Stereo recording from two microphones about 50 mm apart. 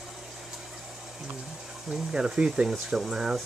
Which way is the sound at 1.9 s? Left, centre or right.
Centre.